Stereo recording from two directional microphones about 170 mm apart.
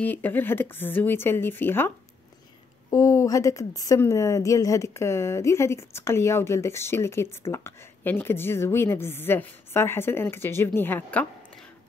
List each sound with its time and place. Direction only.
0.0 s a woman's voice: 10° left (ahead or behind)
2.9 s a woman's voice: 20° left (ahead or behind)